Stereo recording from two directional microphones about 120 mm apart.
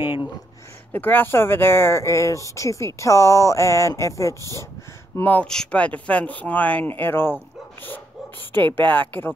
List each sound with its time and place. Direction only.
0.0 s speech: 20° right (ahead or behind)
0.9 s speech: 15° left (ahead or behind)
8.5 s speech: 15° left (ahead or behind)